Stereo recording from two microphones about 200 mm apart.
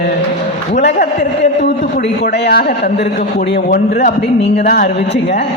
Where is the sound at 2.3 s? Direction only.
55° left (ahead or behind).